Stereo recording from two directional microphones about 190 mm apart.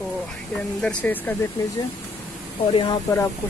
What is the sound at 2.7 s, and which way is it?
Speech, 20° left (ahead or behind).